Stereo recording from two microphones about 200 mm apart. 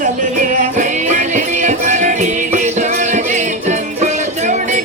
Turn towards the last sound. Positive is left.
turn(degrees=-35)  # may be behind; listen again after turning